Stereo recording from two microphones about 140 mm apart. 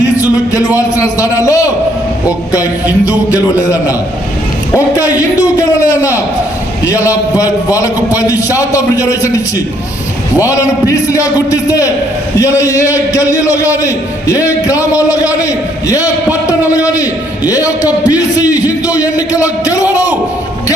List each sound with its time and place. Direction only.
0.2 s a sound: 25° left (ahead or behind)
0.8 s a man's voice: 25° left (ahead or behind)
3.3 s a man's voice: 20° left (ahead or behind)
5.1 s a man's voice: 25° left (ahead or behind)
10.4 s a man's voice: 25° left (ahead or behind)